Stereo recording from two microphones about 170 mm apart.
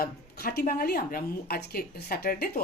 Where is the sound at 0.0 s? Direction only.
60° left (ahead or behind).